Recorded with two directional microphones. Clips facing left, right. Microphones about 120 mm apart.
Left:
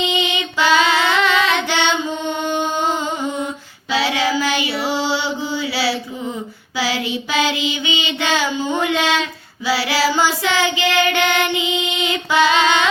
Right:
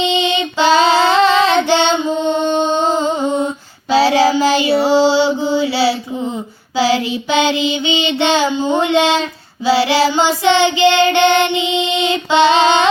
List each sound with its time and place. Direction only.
0.0 s child singing: 30° right (ahead or behind)